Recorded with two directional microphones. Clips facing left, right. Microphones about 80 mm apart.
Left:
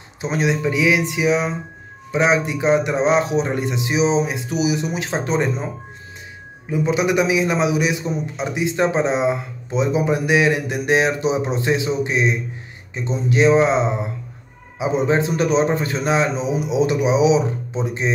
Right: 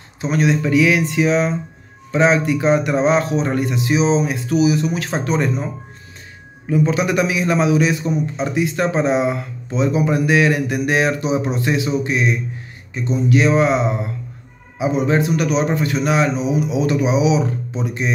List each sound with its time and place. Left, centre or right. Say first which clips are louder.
0.2 s speech: right 2 dB; centre
6.7 s a man's voice: right 1 dB; centre